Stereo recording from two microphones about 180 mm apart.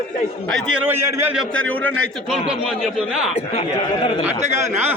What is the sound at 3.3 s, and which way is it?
Speech, 30° left (ahead or behind).